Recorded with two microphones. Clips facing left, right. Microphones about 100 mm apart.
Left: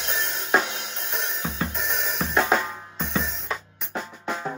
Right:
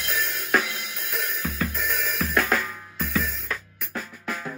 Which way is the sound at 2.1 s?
25° left (ahead or behind).